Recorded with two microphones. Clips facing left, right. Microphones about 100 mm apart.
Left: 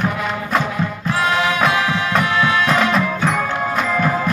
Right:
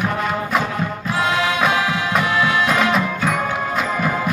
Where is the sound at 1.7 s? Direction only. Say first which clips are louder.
Left 1 dB; 25° right (ahead or behind).